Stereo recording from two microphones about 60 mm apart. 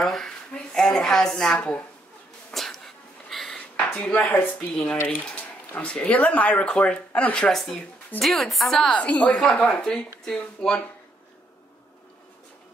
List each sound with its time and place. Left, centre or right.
0.0 s a woman's voice: centre
0.5 s a sound: centre
4.0 s speech: left
4.7 s speech: centre
7.3 s a woman's voice: centre
8.9 s speech: left
9.3 s speech: centre